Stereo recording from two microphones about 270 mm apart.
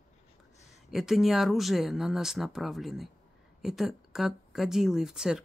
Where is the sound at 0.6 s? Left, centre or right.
Left.